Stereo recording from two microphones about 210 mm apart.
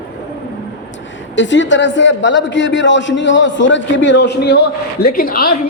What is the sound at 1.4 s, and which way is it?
A man's voice, 60° left (ahead or behind).